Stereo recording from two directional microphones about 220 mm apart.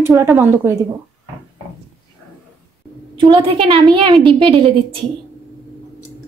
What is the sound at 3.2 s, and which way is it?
A woman's voice, 25° right (ahead or behind).